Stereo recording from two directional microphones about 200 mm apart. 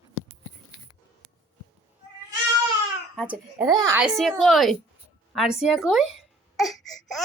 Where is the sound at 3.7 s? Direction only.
15° right (ahead or behind).